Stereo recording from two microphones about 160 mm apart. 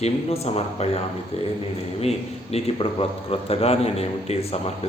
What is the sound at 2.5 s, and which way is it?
A man's voice, 35° left (ahead or behind).